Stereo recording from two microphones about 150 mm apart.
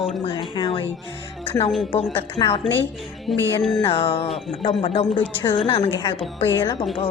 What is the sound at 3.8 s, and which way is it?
A woman's voice, 40° left (ahead or behind).